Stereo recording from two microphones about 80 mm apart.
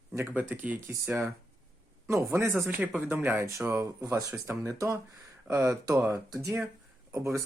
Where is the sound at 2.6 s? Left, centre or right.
Right.